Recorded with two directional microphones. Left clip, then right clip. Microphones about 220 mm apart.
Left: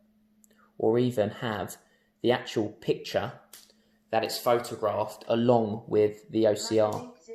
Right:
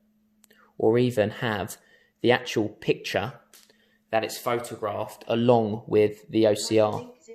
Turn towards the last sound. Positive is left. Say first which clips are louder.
# right 3 dB
turn(degrees=-45)  # may be behind; listen again after turning